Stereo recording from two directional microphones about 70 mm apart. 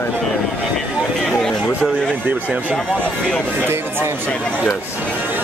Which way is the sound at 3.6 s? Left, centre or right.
Right.